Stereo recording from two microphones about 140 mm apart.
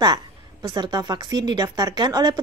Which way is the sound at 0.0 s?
30° right (ahead or behind).